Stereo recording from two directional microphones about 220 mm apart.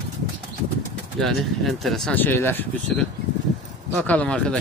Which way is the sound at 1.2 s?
Centre (ahead or behind).